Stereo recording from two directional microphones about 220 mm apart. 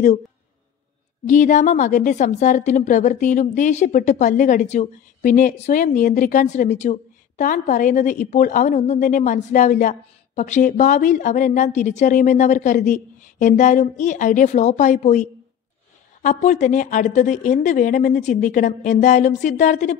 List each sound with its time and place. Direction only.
1.2 s a woman's voice: 35° left (ahead or behind)
16.3 s a woman's voice: 35° left (ahead or behind)